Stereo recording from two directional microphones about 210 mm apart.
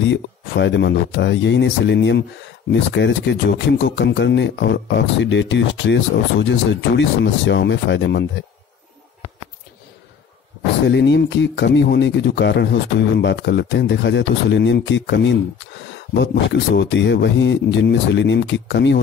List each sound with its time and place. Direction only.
0.0 s speech: 60° left (ahead or behind)
10.9 s speech: 55° left (ahead or behind)